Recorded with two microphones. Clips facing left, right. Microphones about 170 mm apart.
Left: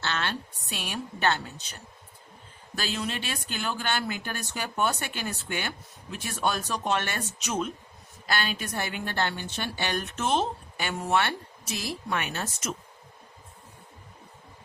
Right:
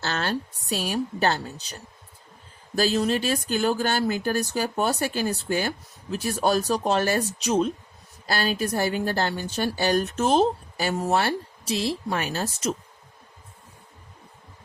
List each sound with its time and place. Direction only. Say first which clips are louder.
0.0 s a woman's voice: right 4 dB; 40° right (ahead or behind)